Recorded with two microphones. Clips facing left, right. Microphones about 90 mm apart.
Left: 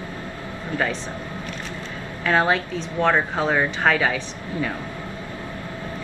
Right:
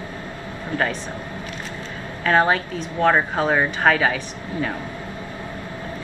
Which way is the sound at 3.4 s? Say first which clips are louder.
Right 2 dB; 20° right (ahead or behind).